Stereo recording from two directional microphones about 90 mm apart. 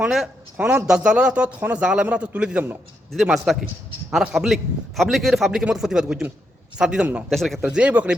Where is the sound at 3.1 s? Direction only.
Centre (ahead or behind).